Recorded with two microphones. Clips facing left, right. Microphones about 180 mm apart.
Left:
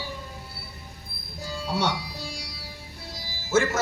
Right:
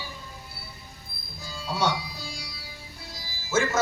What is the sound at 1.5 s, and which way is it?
Music, 70° left (ahead or behind).